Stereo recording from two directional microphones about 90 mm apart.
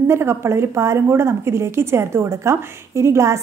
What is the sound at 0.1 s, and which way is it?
A woman's voice, 30° right (ahead or behind).